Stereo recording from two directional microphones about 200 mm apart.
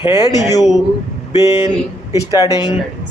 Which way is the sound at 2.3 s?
20° left (ahead or behind).